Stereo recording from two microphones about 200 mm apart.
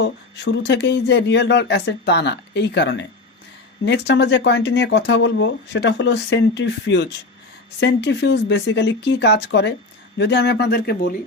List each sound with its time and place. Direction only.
0.0 s speech: 60° left (ahead or behind)